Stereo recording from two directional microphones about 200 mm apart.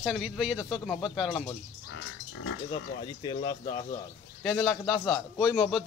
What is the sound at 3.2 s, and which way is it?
Speech, 20° left (ahead or behind).